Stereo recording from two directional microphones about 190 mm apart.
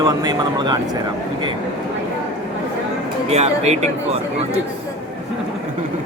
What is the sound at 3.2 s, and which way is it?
Speech, 35° right (ahead or behind).